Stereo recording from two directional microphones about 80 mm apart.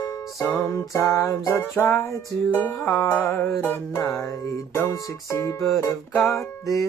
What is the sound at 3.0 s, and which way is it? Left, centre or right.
Music, left.